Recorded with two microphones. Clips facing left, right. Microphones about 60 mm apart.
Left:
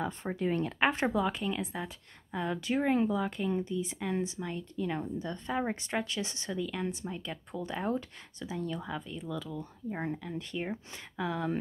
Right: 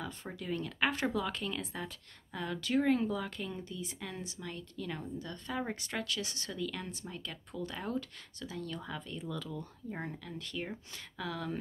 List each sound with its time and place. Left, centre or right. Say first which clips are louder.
0.0 s speech: left 9 dB; left